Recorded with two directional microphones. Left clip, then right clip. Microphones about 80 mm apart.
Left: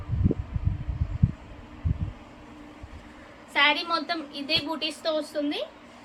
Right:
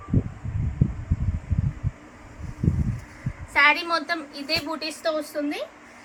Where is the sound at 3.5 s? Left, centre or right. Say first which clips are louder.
Right 3 dB; centre.